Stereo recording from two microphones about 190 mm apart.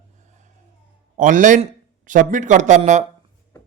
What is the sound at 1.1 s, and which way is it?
A man's voice, 40° right (ahead or behind).